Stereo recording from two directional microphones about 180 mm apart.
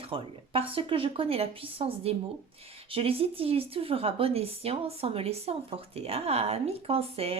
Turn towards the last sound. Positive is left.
turn(degrees=-35)  # may be behind; listen again after turning